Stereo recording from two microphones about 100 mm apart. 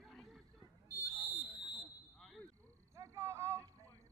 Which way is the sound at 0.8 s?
20° right (ahead or behind).